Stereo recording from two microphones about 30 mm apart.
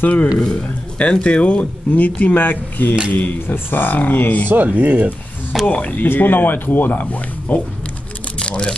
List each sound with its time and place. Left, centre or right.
0.0 s speech: left
0.6 s speech: left
3.1 s speech: left
3.9 s speech: left
4.6 s speech: right
5.7 s speech: left
8.4 s typing: left